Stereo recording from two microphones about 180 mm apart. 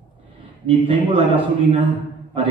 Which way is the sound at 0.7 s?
30° right (ahead or behind).